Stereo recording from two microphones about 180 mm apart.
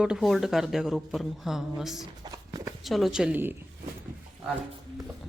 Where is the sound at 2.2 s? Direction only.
20° right (ahead or behind).